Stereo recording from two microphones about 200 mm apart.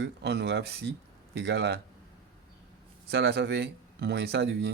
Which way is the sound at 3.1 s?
55° right (ahead or behind).